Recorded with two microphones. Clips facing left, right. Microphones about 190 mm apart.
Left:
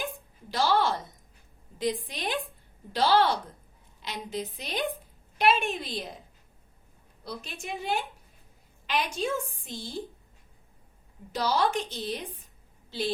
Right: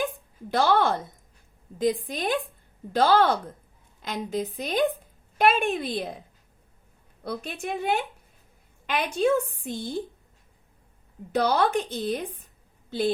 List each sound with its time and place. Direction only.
0.5 s a woman's voice: 55° right (ahead or behind)
7.3 s a woman's voice: 60° right (ahead or behind)
9.1 s a woman's voice: 60° right (ahead or behind)
11.3 s a woman's voice: 60° right (ahead or behind)